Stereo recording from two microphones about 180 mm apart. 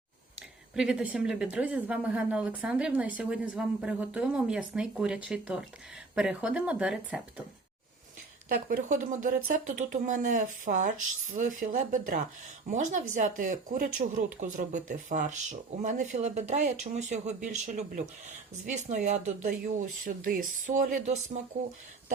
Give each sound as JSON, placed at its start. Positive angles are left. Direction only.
{"t": 0.3, "sound": "speech", "side_deg": -5}
{"t": 8.4, "sound": "speech", "side_deg": -55}